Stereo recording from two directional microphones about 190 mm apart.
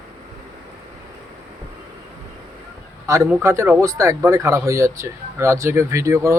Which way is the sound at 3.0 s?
15° right (ahead or behind).